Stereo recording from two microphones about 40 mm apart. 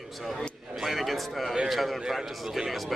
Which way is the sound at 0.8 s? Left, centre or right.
Centre.